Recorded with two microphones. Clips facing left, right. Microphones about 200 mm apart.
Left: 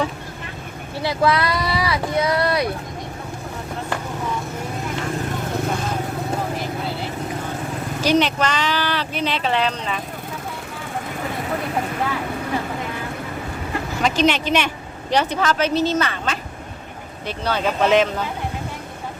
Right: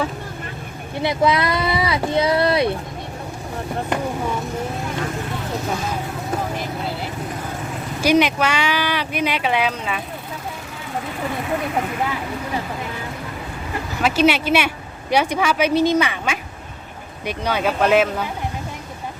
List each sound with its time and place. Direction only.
0.9 s speech: 20° right (ahead or behind)
8.0 s speech: 10° right (ahead or behind)
14.0 s speech: 10° right (ahead or behind)